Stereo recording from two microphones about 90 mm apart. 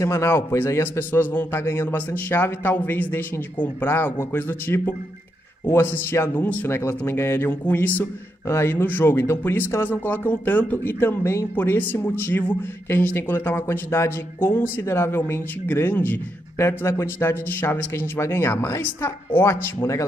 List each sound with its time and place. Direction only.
0.0 s speech: 35° left (ahead or behind)
8.5 s speech: 30° left (ahead or behind)